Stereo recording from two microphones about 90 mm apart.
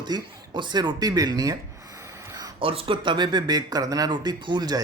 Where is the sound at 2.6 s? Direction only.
90° right; by 4.1 s 45° right (ahead or behind).